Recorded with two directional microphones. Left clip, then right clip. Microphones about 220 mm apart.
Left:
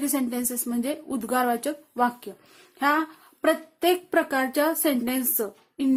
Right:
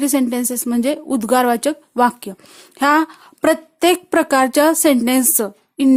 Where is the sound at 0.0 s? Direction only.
35° right (ahead or behind).